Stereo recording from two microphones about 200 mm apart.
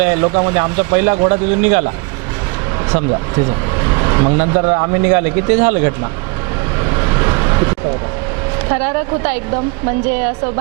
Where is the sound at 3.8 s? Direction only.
25° right (ahead or behind).